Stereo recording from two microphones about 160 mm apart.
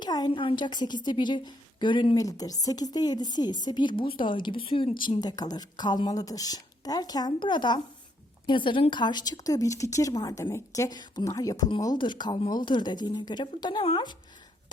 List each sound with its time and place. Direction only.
0.0 s speech: 25° left (ahead or behind)